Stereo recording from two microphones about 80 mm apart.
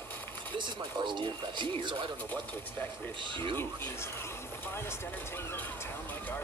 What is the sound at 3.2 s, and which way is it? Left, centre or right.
Speech, right.